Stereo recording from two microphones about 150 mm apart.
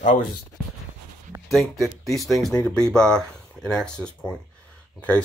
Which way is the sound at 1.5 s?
Centre (ahead or behind).